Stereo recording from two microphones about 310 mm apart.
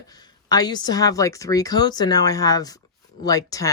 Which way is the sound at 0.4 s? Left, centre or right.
Centre.